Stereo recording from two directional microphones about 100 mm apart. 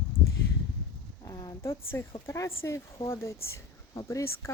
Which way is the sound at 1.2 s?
35° left (ahead or behind).